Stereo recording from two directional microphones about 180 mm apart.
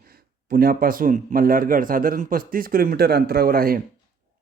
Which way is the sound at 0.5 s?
55° right (ahead or behind).